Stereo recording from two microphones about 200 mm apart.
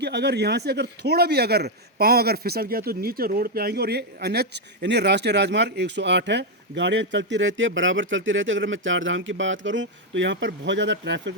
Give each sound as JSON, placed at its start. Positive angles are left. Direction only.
{"t": 0.0, "sound": "a man's voice", "side_deg": -55}